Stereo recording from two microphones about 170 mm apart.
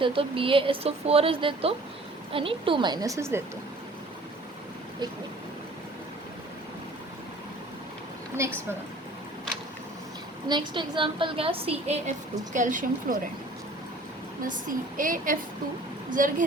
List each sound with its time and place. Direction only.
0.0 s a woman's voice: 30° right (ahead or behind); by 3.4 s 15° right (ahead or behind)
10.5 s speech: 30° right (ahead or behind)
12.5 s a woman's voice: 50° right (ahead or behind)
14.4 s a woman's voice: 50° right (ahead or behind)